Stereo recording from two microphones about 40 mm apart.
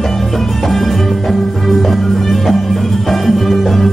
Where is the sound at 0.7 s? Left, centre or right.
Centre.